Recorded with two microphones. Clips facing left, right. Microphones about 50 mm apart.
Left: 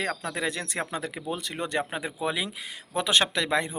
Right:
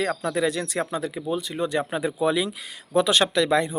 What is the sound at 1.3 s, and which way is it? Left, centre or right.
Speech, left.